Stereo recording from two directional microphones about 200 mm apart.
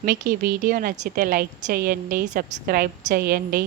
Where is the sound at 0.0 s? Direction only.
50° right (ahead or behind).